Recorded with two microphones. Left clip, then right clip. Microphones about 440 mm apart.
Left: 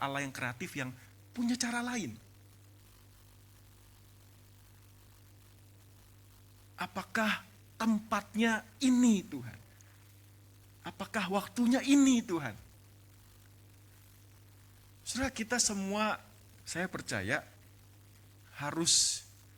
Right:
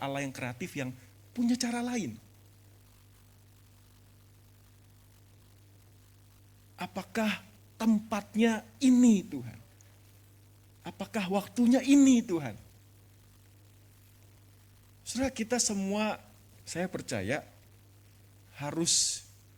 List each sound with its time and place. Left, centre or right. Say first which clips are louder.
0.0 s speech: even; left
6.7 s a woman's voice: even; left
10.8 s a woman's voice: right 1 dB; left
15.0 s a woman's voice: right 3 dB; left
18.5 s speech: even; left